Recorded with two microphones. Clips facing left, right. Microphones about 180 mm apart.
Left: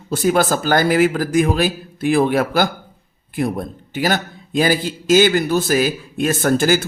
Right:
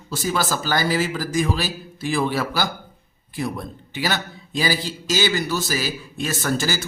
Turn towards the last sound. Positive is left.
turn(degrees=55)  # may be behind; listen again after turning